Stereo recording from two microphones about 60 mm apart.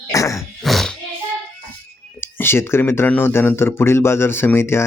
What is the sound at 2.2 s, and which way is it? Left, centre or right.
Speech, left.